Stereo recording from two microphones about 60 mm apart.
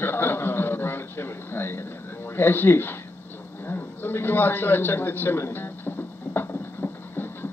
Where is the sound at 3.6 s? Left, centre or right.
Left.